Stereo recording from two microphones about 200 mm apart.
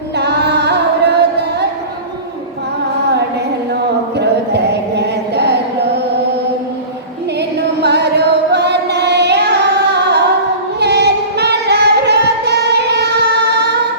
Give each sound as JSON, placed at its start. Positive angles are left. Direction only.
{"t": 0.2, "sound": "music", "side_deg": -55}
{"t": 4.2, "sound": "chant", "side_deg": -55}
{"t": 7.8, "sound": "singing", "side_deg": -55}